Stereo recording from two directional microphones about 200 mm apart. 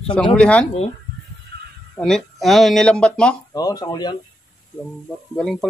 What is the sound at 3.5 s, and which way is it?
Speech, 20° left (ahead or behind).